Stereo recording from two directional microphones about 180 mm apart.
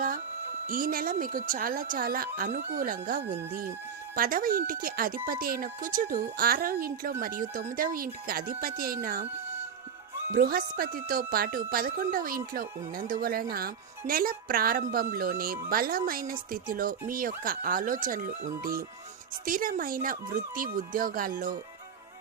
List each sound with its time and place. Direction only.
0.7 s speech: 50° right (ahead or behind)
10.3 s a woman's voice: 55° right (ahead or behind)